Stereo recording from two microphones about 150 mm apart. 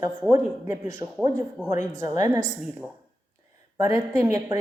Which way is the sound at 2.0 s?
20° right (ahead or behind).